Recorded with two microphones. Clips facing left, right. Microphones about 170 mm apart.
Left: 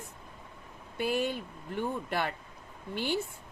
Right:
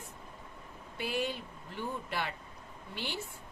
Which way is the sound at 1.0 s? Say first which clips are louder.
Left 5 dB; 50° left (ahead or behind).